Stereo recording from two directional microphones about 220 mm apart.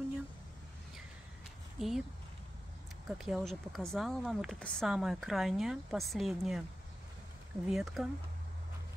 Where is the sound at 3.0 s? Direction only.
Centre (ahead or behind).